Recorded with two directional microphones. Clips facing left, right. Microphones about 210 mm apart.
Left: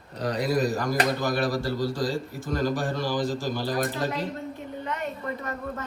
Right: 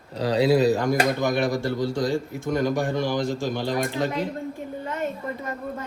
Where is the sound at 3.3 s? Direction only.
25° right (ahead or behind).